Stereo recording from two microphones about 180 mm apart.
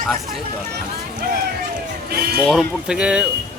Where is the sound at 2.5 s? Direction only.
Centre (ahead or behind).